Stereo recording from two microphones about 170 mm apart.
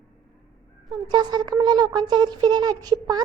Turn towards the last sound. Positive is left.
turn(degrees=-25)  # may be behind; listen again after turning